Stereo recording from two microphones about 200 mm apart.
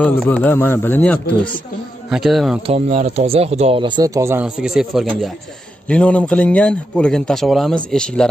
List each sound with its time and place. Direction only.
0.0 s a man's voice: 5° left (ahead or behind)
2.0 s a man's voice: centre (ahead or behind)
2.6 s speech: 30° right (ahead or behind); by 4.5 s 15° right (ahead or behind)
4.6 s a man's voice: centre (ahead or behind)